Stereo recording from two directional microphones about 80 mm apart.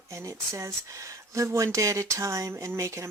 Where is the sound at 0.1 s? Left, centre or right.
Right.